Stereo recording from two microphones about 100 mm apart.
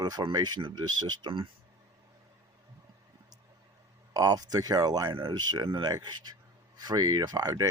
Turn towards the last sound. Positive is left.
turn(degrees=-40)  # may be behind; listen again after turning